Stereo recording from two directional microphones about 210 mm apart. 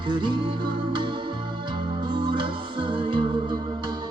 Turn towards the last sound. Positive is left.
turn(degrees=-25)  # may be behind; listen again after turning